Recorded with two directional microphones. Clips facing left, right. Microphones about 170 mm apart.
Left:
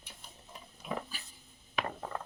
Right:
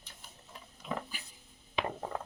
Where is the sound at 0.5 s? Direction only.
15° left (ahead or behind).